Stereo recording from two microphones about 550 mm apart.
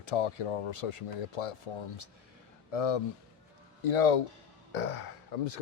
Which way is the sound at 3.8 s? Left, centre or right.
Left.